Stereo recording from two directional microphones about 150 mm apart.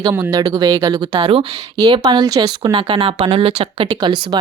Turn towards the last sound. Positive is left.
turn(degrees=-35)  # may be behind; listen again after turning